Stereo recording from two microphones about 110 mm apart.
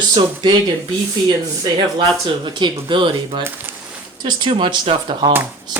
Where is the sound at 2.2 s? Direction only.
45° right (ahead or behind).